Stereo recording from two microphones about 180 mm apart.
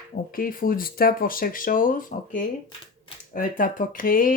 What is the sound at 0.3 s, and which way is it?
Speech, 50° left (ahead or behind).